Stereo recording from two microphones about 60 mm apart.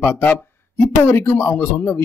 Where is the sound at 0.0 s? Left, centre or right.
Left.